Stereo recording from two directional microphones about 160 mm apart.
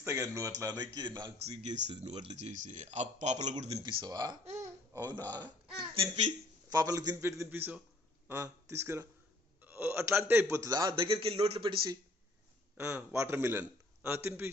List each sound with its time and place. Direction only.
0.0 s a man's voice: 20° right (ahead or behind)
1.2 s a man's voice: 40° right (ahead or behind)
3.8 s a man's voice: 30° right (ahead or behind)
6.7 s a man's voice: 20° right (ahead or behind); by 11.7 s 35° right (ahead or behind)
12.7 s a man's voice: 15° right (ahead or behind)